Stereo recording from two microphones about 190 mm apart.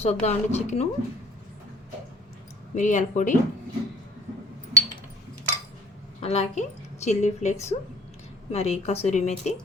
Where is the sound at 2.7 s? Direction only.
40° left (ahead or behind).